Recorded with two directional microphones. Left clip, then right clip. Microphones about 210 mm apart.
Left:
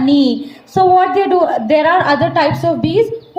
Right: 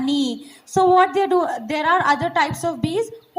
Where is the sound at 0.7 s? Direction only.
45° right (ahead or behind).